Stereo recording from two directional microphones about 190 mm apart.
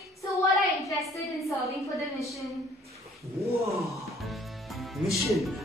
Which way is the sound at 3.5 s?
15° right (ahead or behind).